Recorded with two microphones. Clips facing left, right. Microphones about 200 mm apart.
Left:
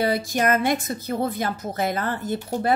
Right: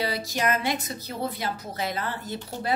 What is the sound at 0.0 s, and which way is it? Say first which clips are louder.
A woman's voice: left 5 dB; 50° left (ahead or behind).